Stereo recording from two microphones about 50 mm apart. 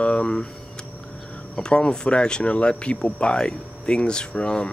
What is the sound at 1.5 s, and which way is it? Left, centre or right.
Speech, centre.